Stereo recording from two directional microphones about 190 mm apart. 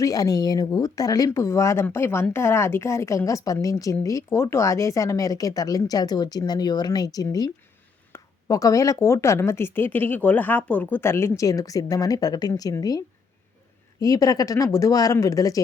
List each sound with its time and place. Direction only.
0.0 s speech: 20° left (ahead or behind)
14.0 s speech: 20° left (ahead or behind)